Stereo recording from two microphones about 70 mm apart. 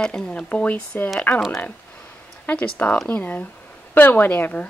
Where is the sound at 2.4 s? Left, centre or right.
Left.